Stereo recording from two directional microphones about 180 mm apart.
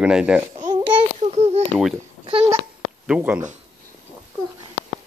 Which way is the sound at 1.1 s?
40° right (ahead or behind).